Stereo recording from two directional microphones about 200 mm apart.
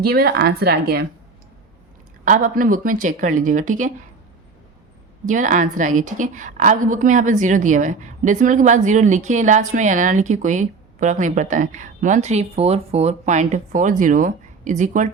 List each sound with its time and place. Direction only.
0.0 s a woman's voice: 50° right (ahead or behind)
2.2 s a woman's voice: 40° right (ahead or behind)
5.3 s a woman's voice: 40° right (ahead or behind)